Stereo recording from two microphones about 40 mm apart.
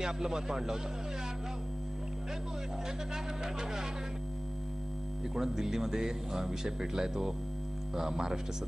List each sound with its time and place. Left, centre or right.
0.0 s speech: centre
5.3 s speech: centre